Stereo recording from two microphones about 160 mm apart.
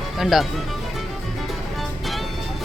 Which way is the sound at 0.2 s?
Centre (ahead or behind).